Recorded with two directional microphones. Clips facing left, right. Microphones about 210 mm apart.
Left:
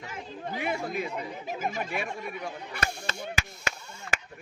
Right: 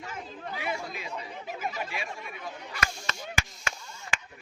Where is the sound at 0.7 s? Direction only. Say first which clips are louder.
Left 5 dB; 55° left (ahead or behind).